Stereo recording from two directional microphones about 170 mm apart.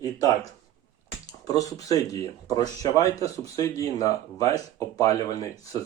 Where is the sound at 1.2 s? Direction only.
20° left (ahead or behind).